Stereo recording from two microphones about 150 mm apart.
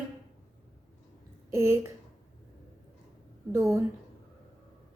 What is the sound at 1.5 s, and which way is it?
Speech, 15° right (ahead or behind).